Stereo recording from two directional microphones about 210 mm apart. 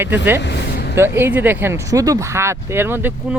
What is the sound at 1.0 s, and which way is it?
Speech, 10° right (ahead or behind).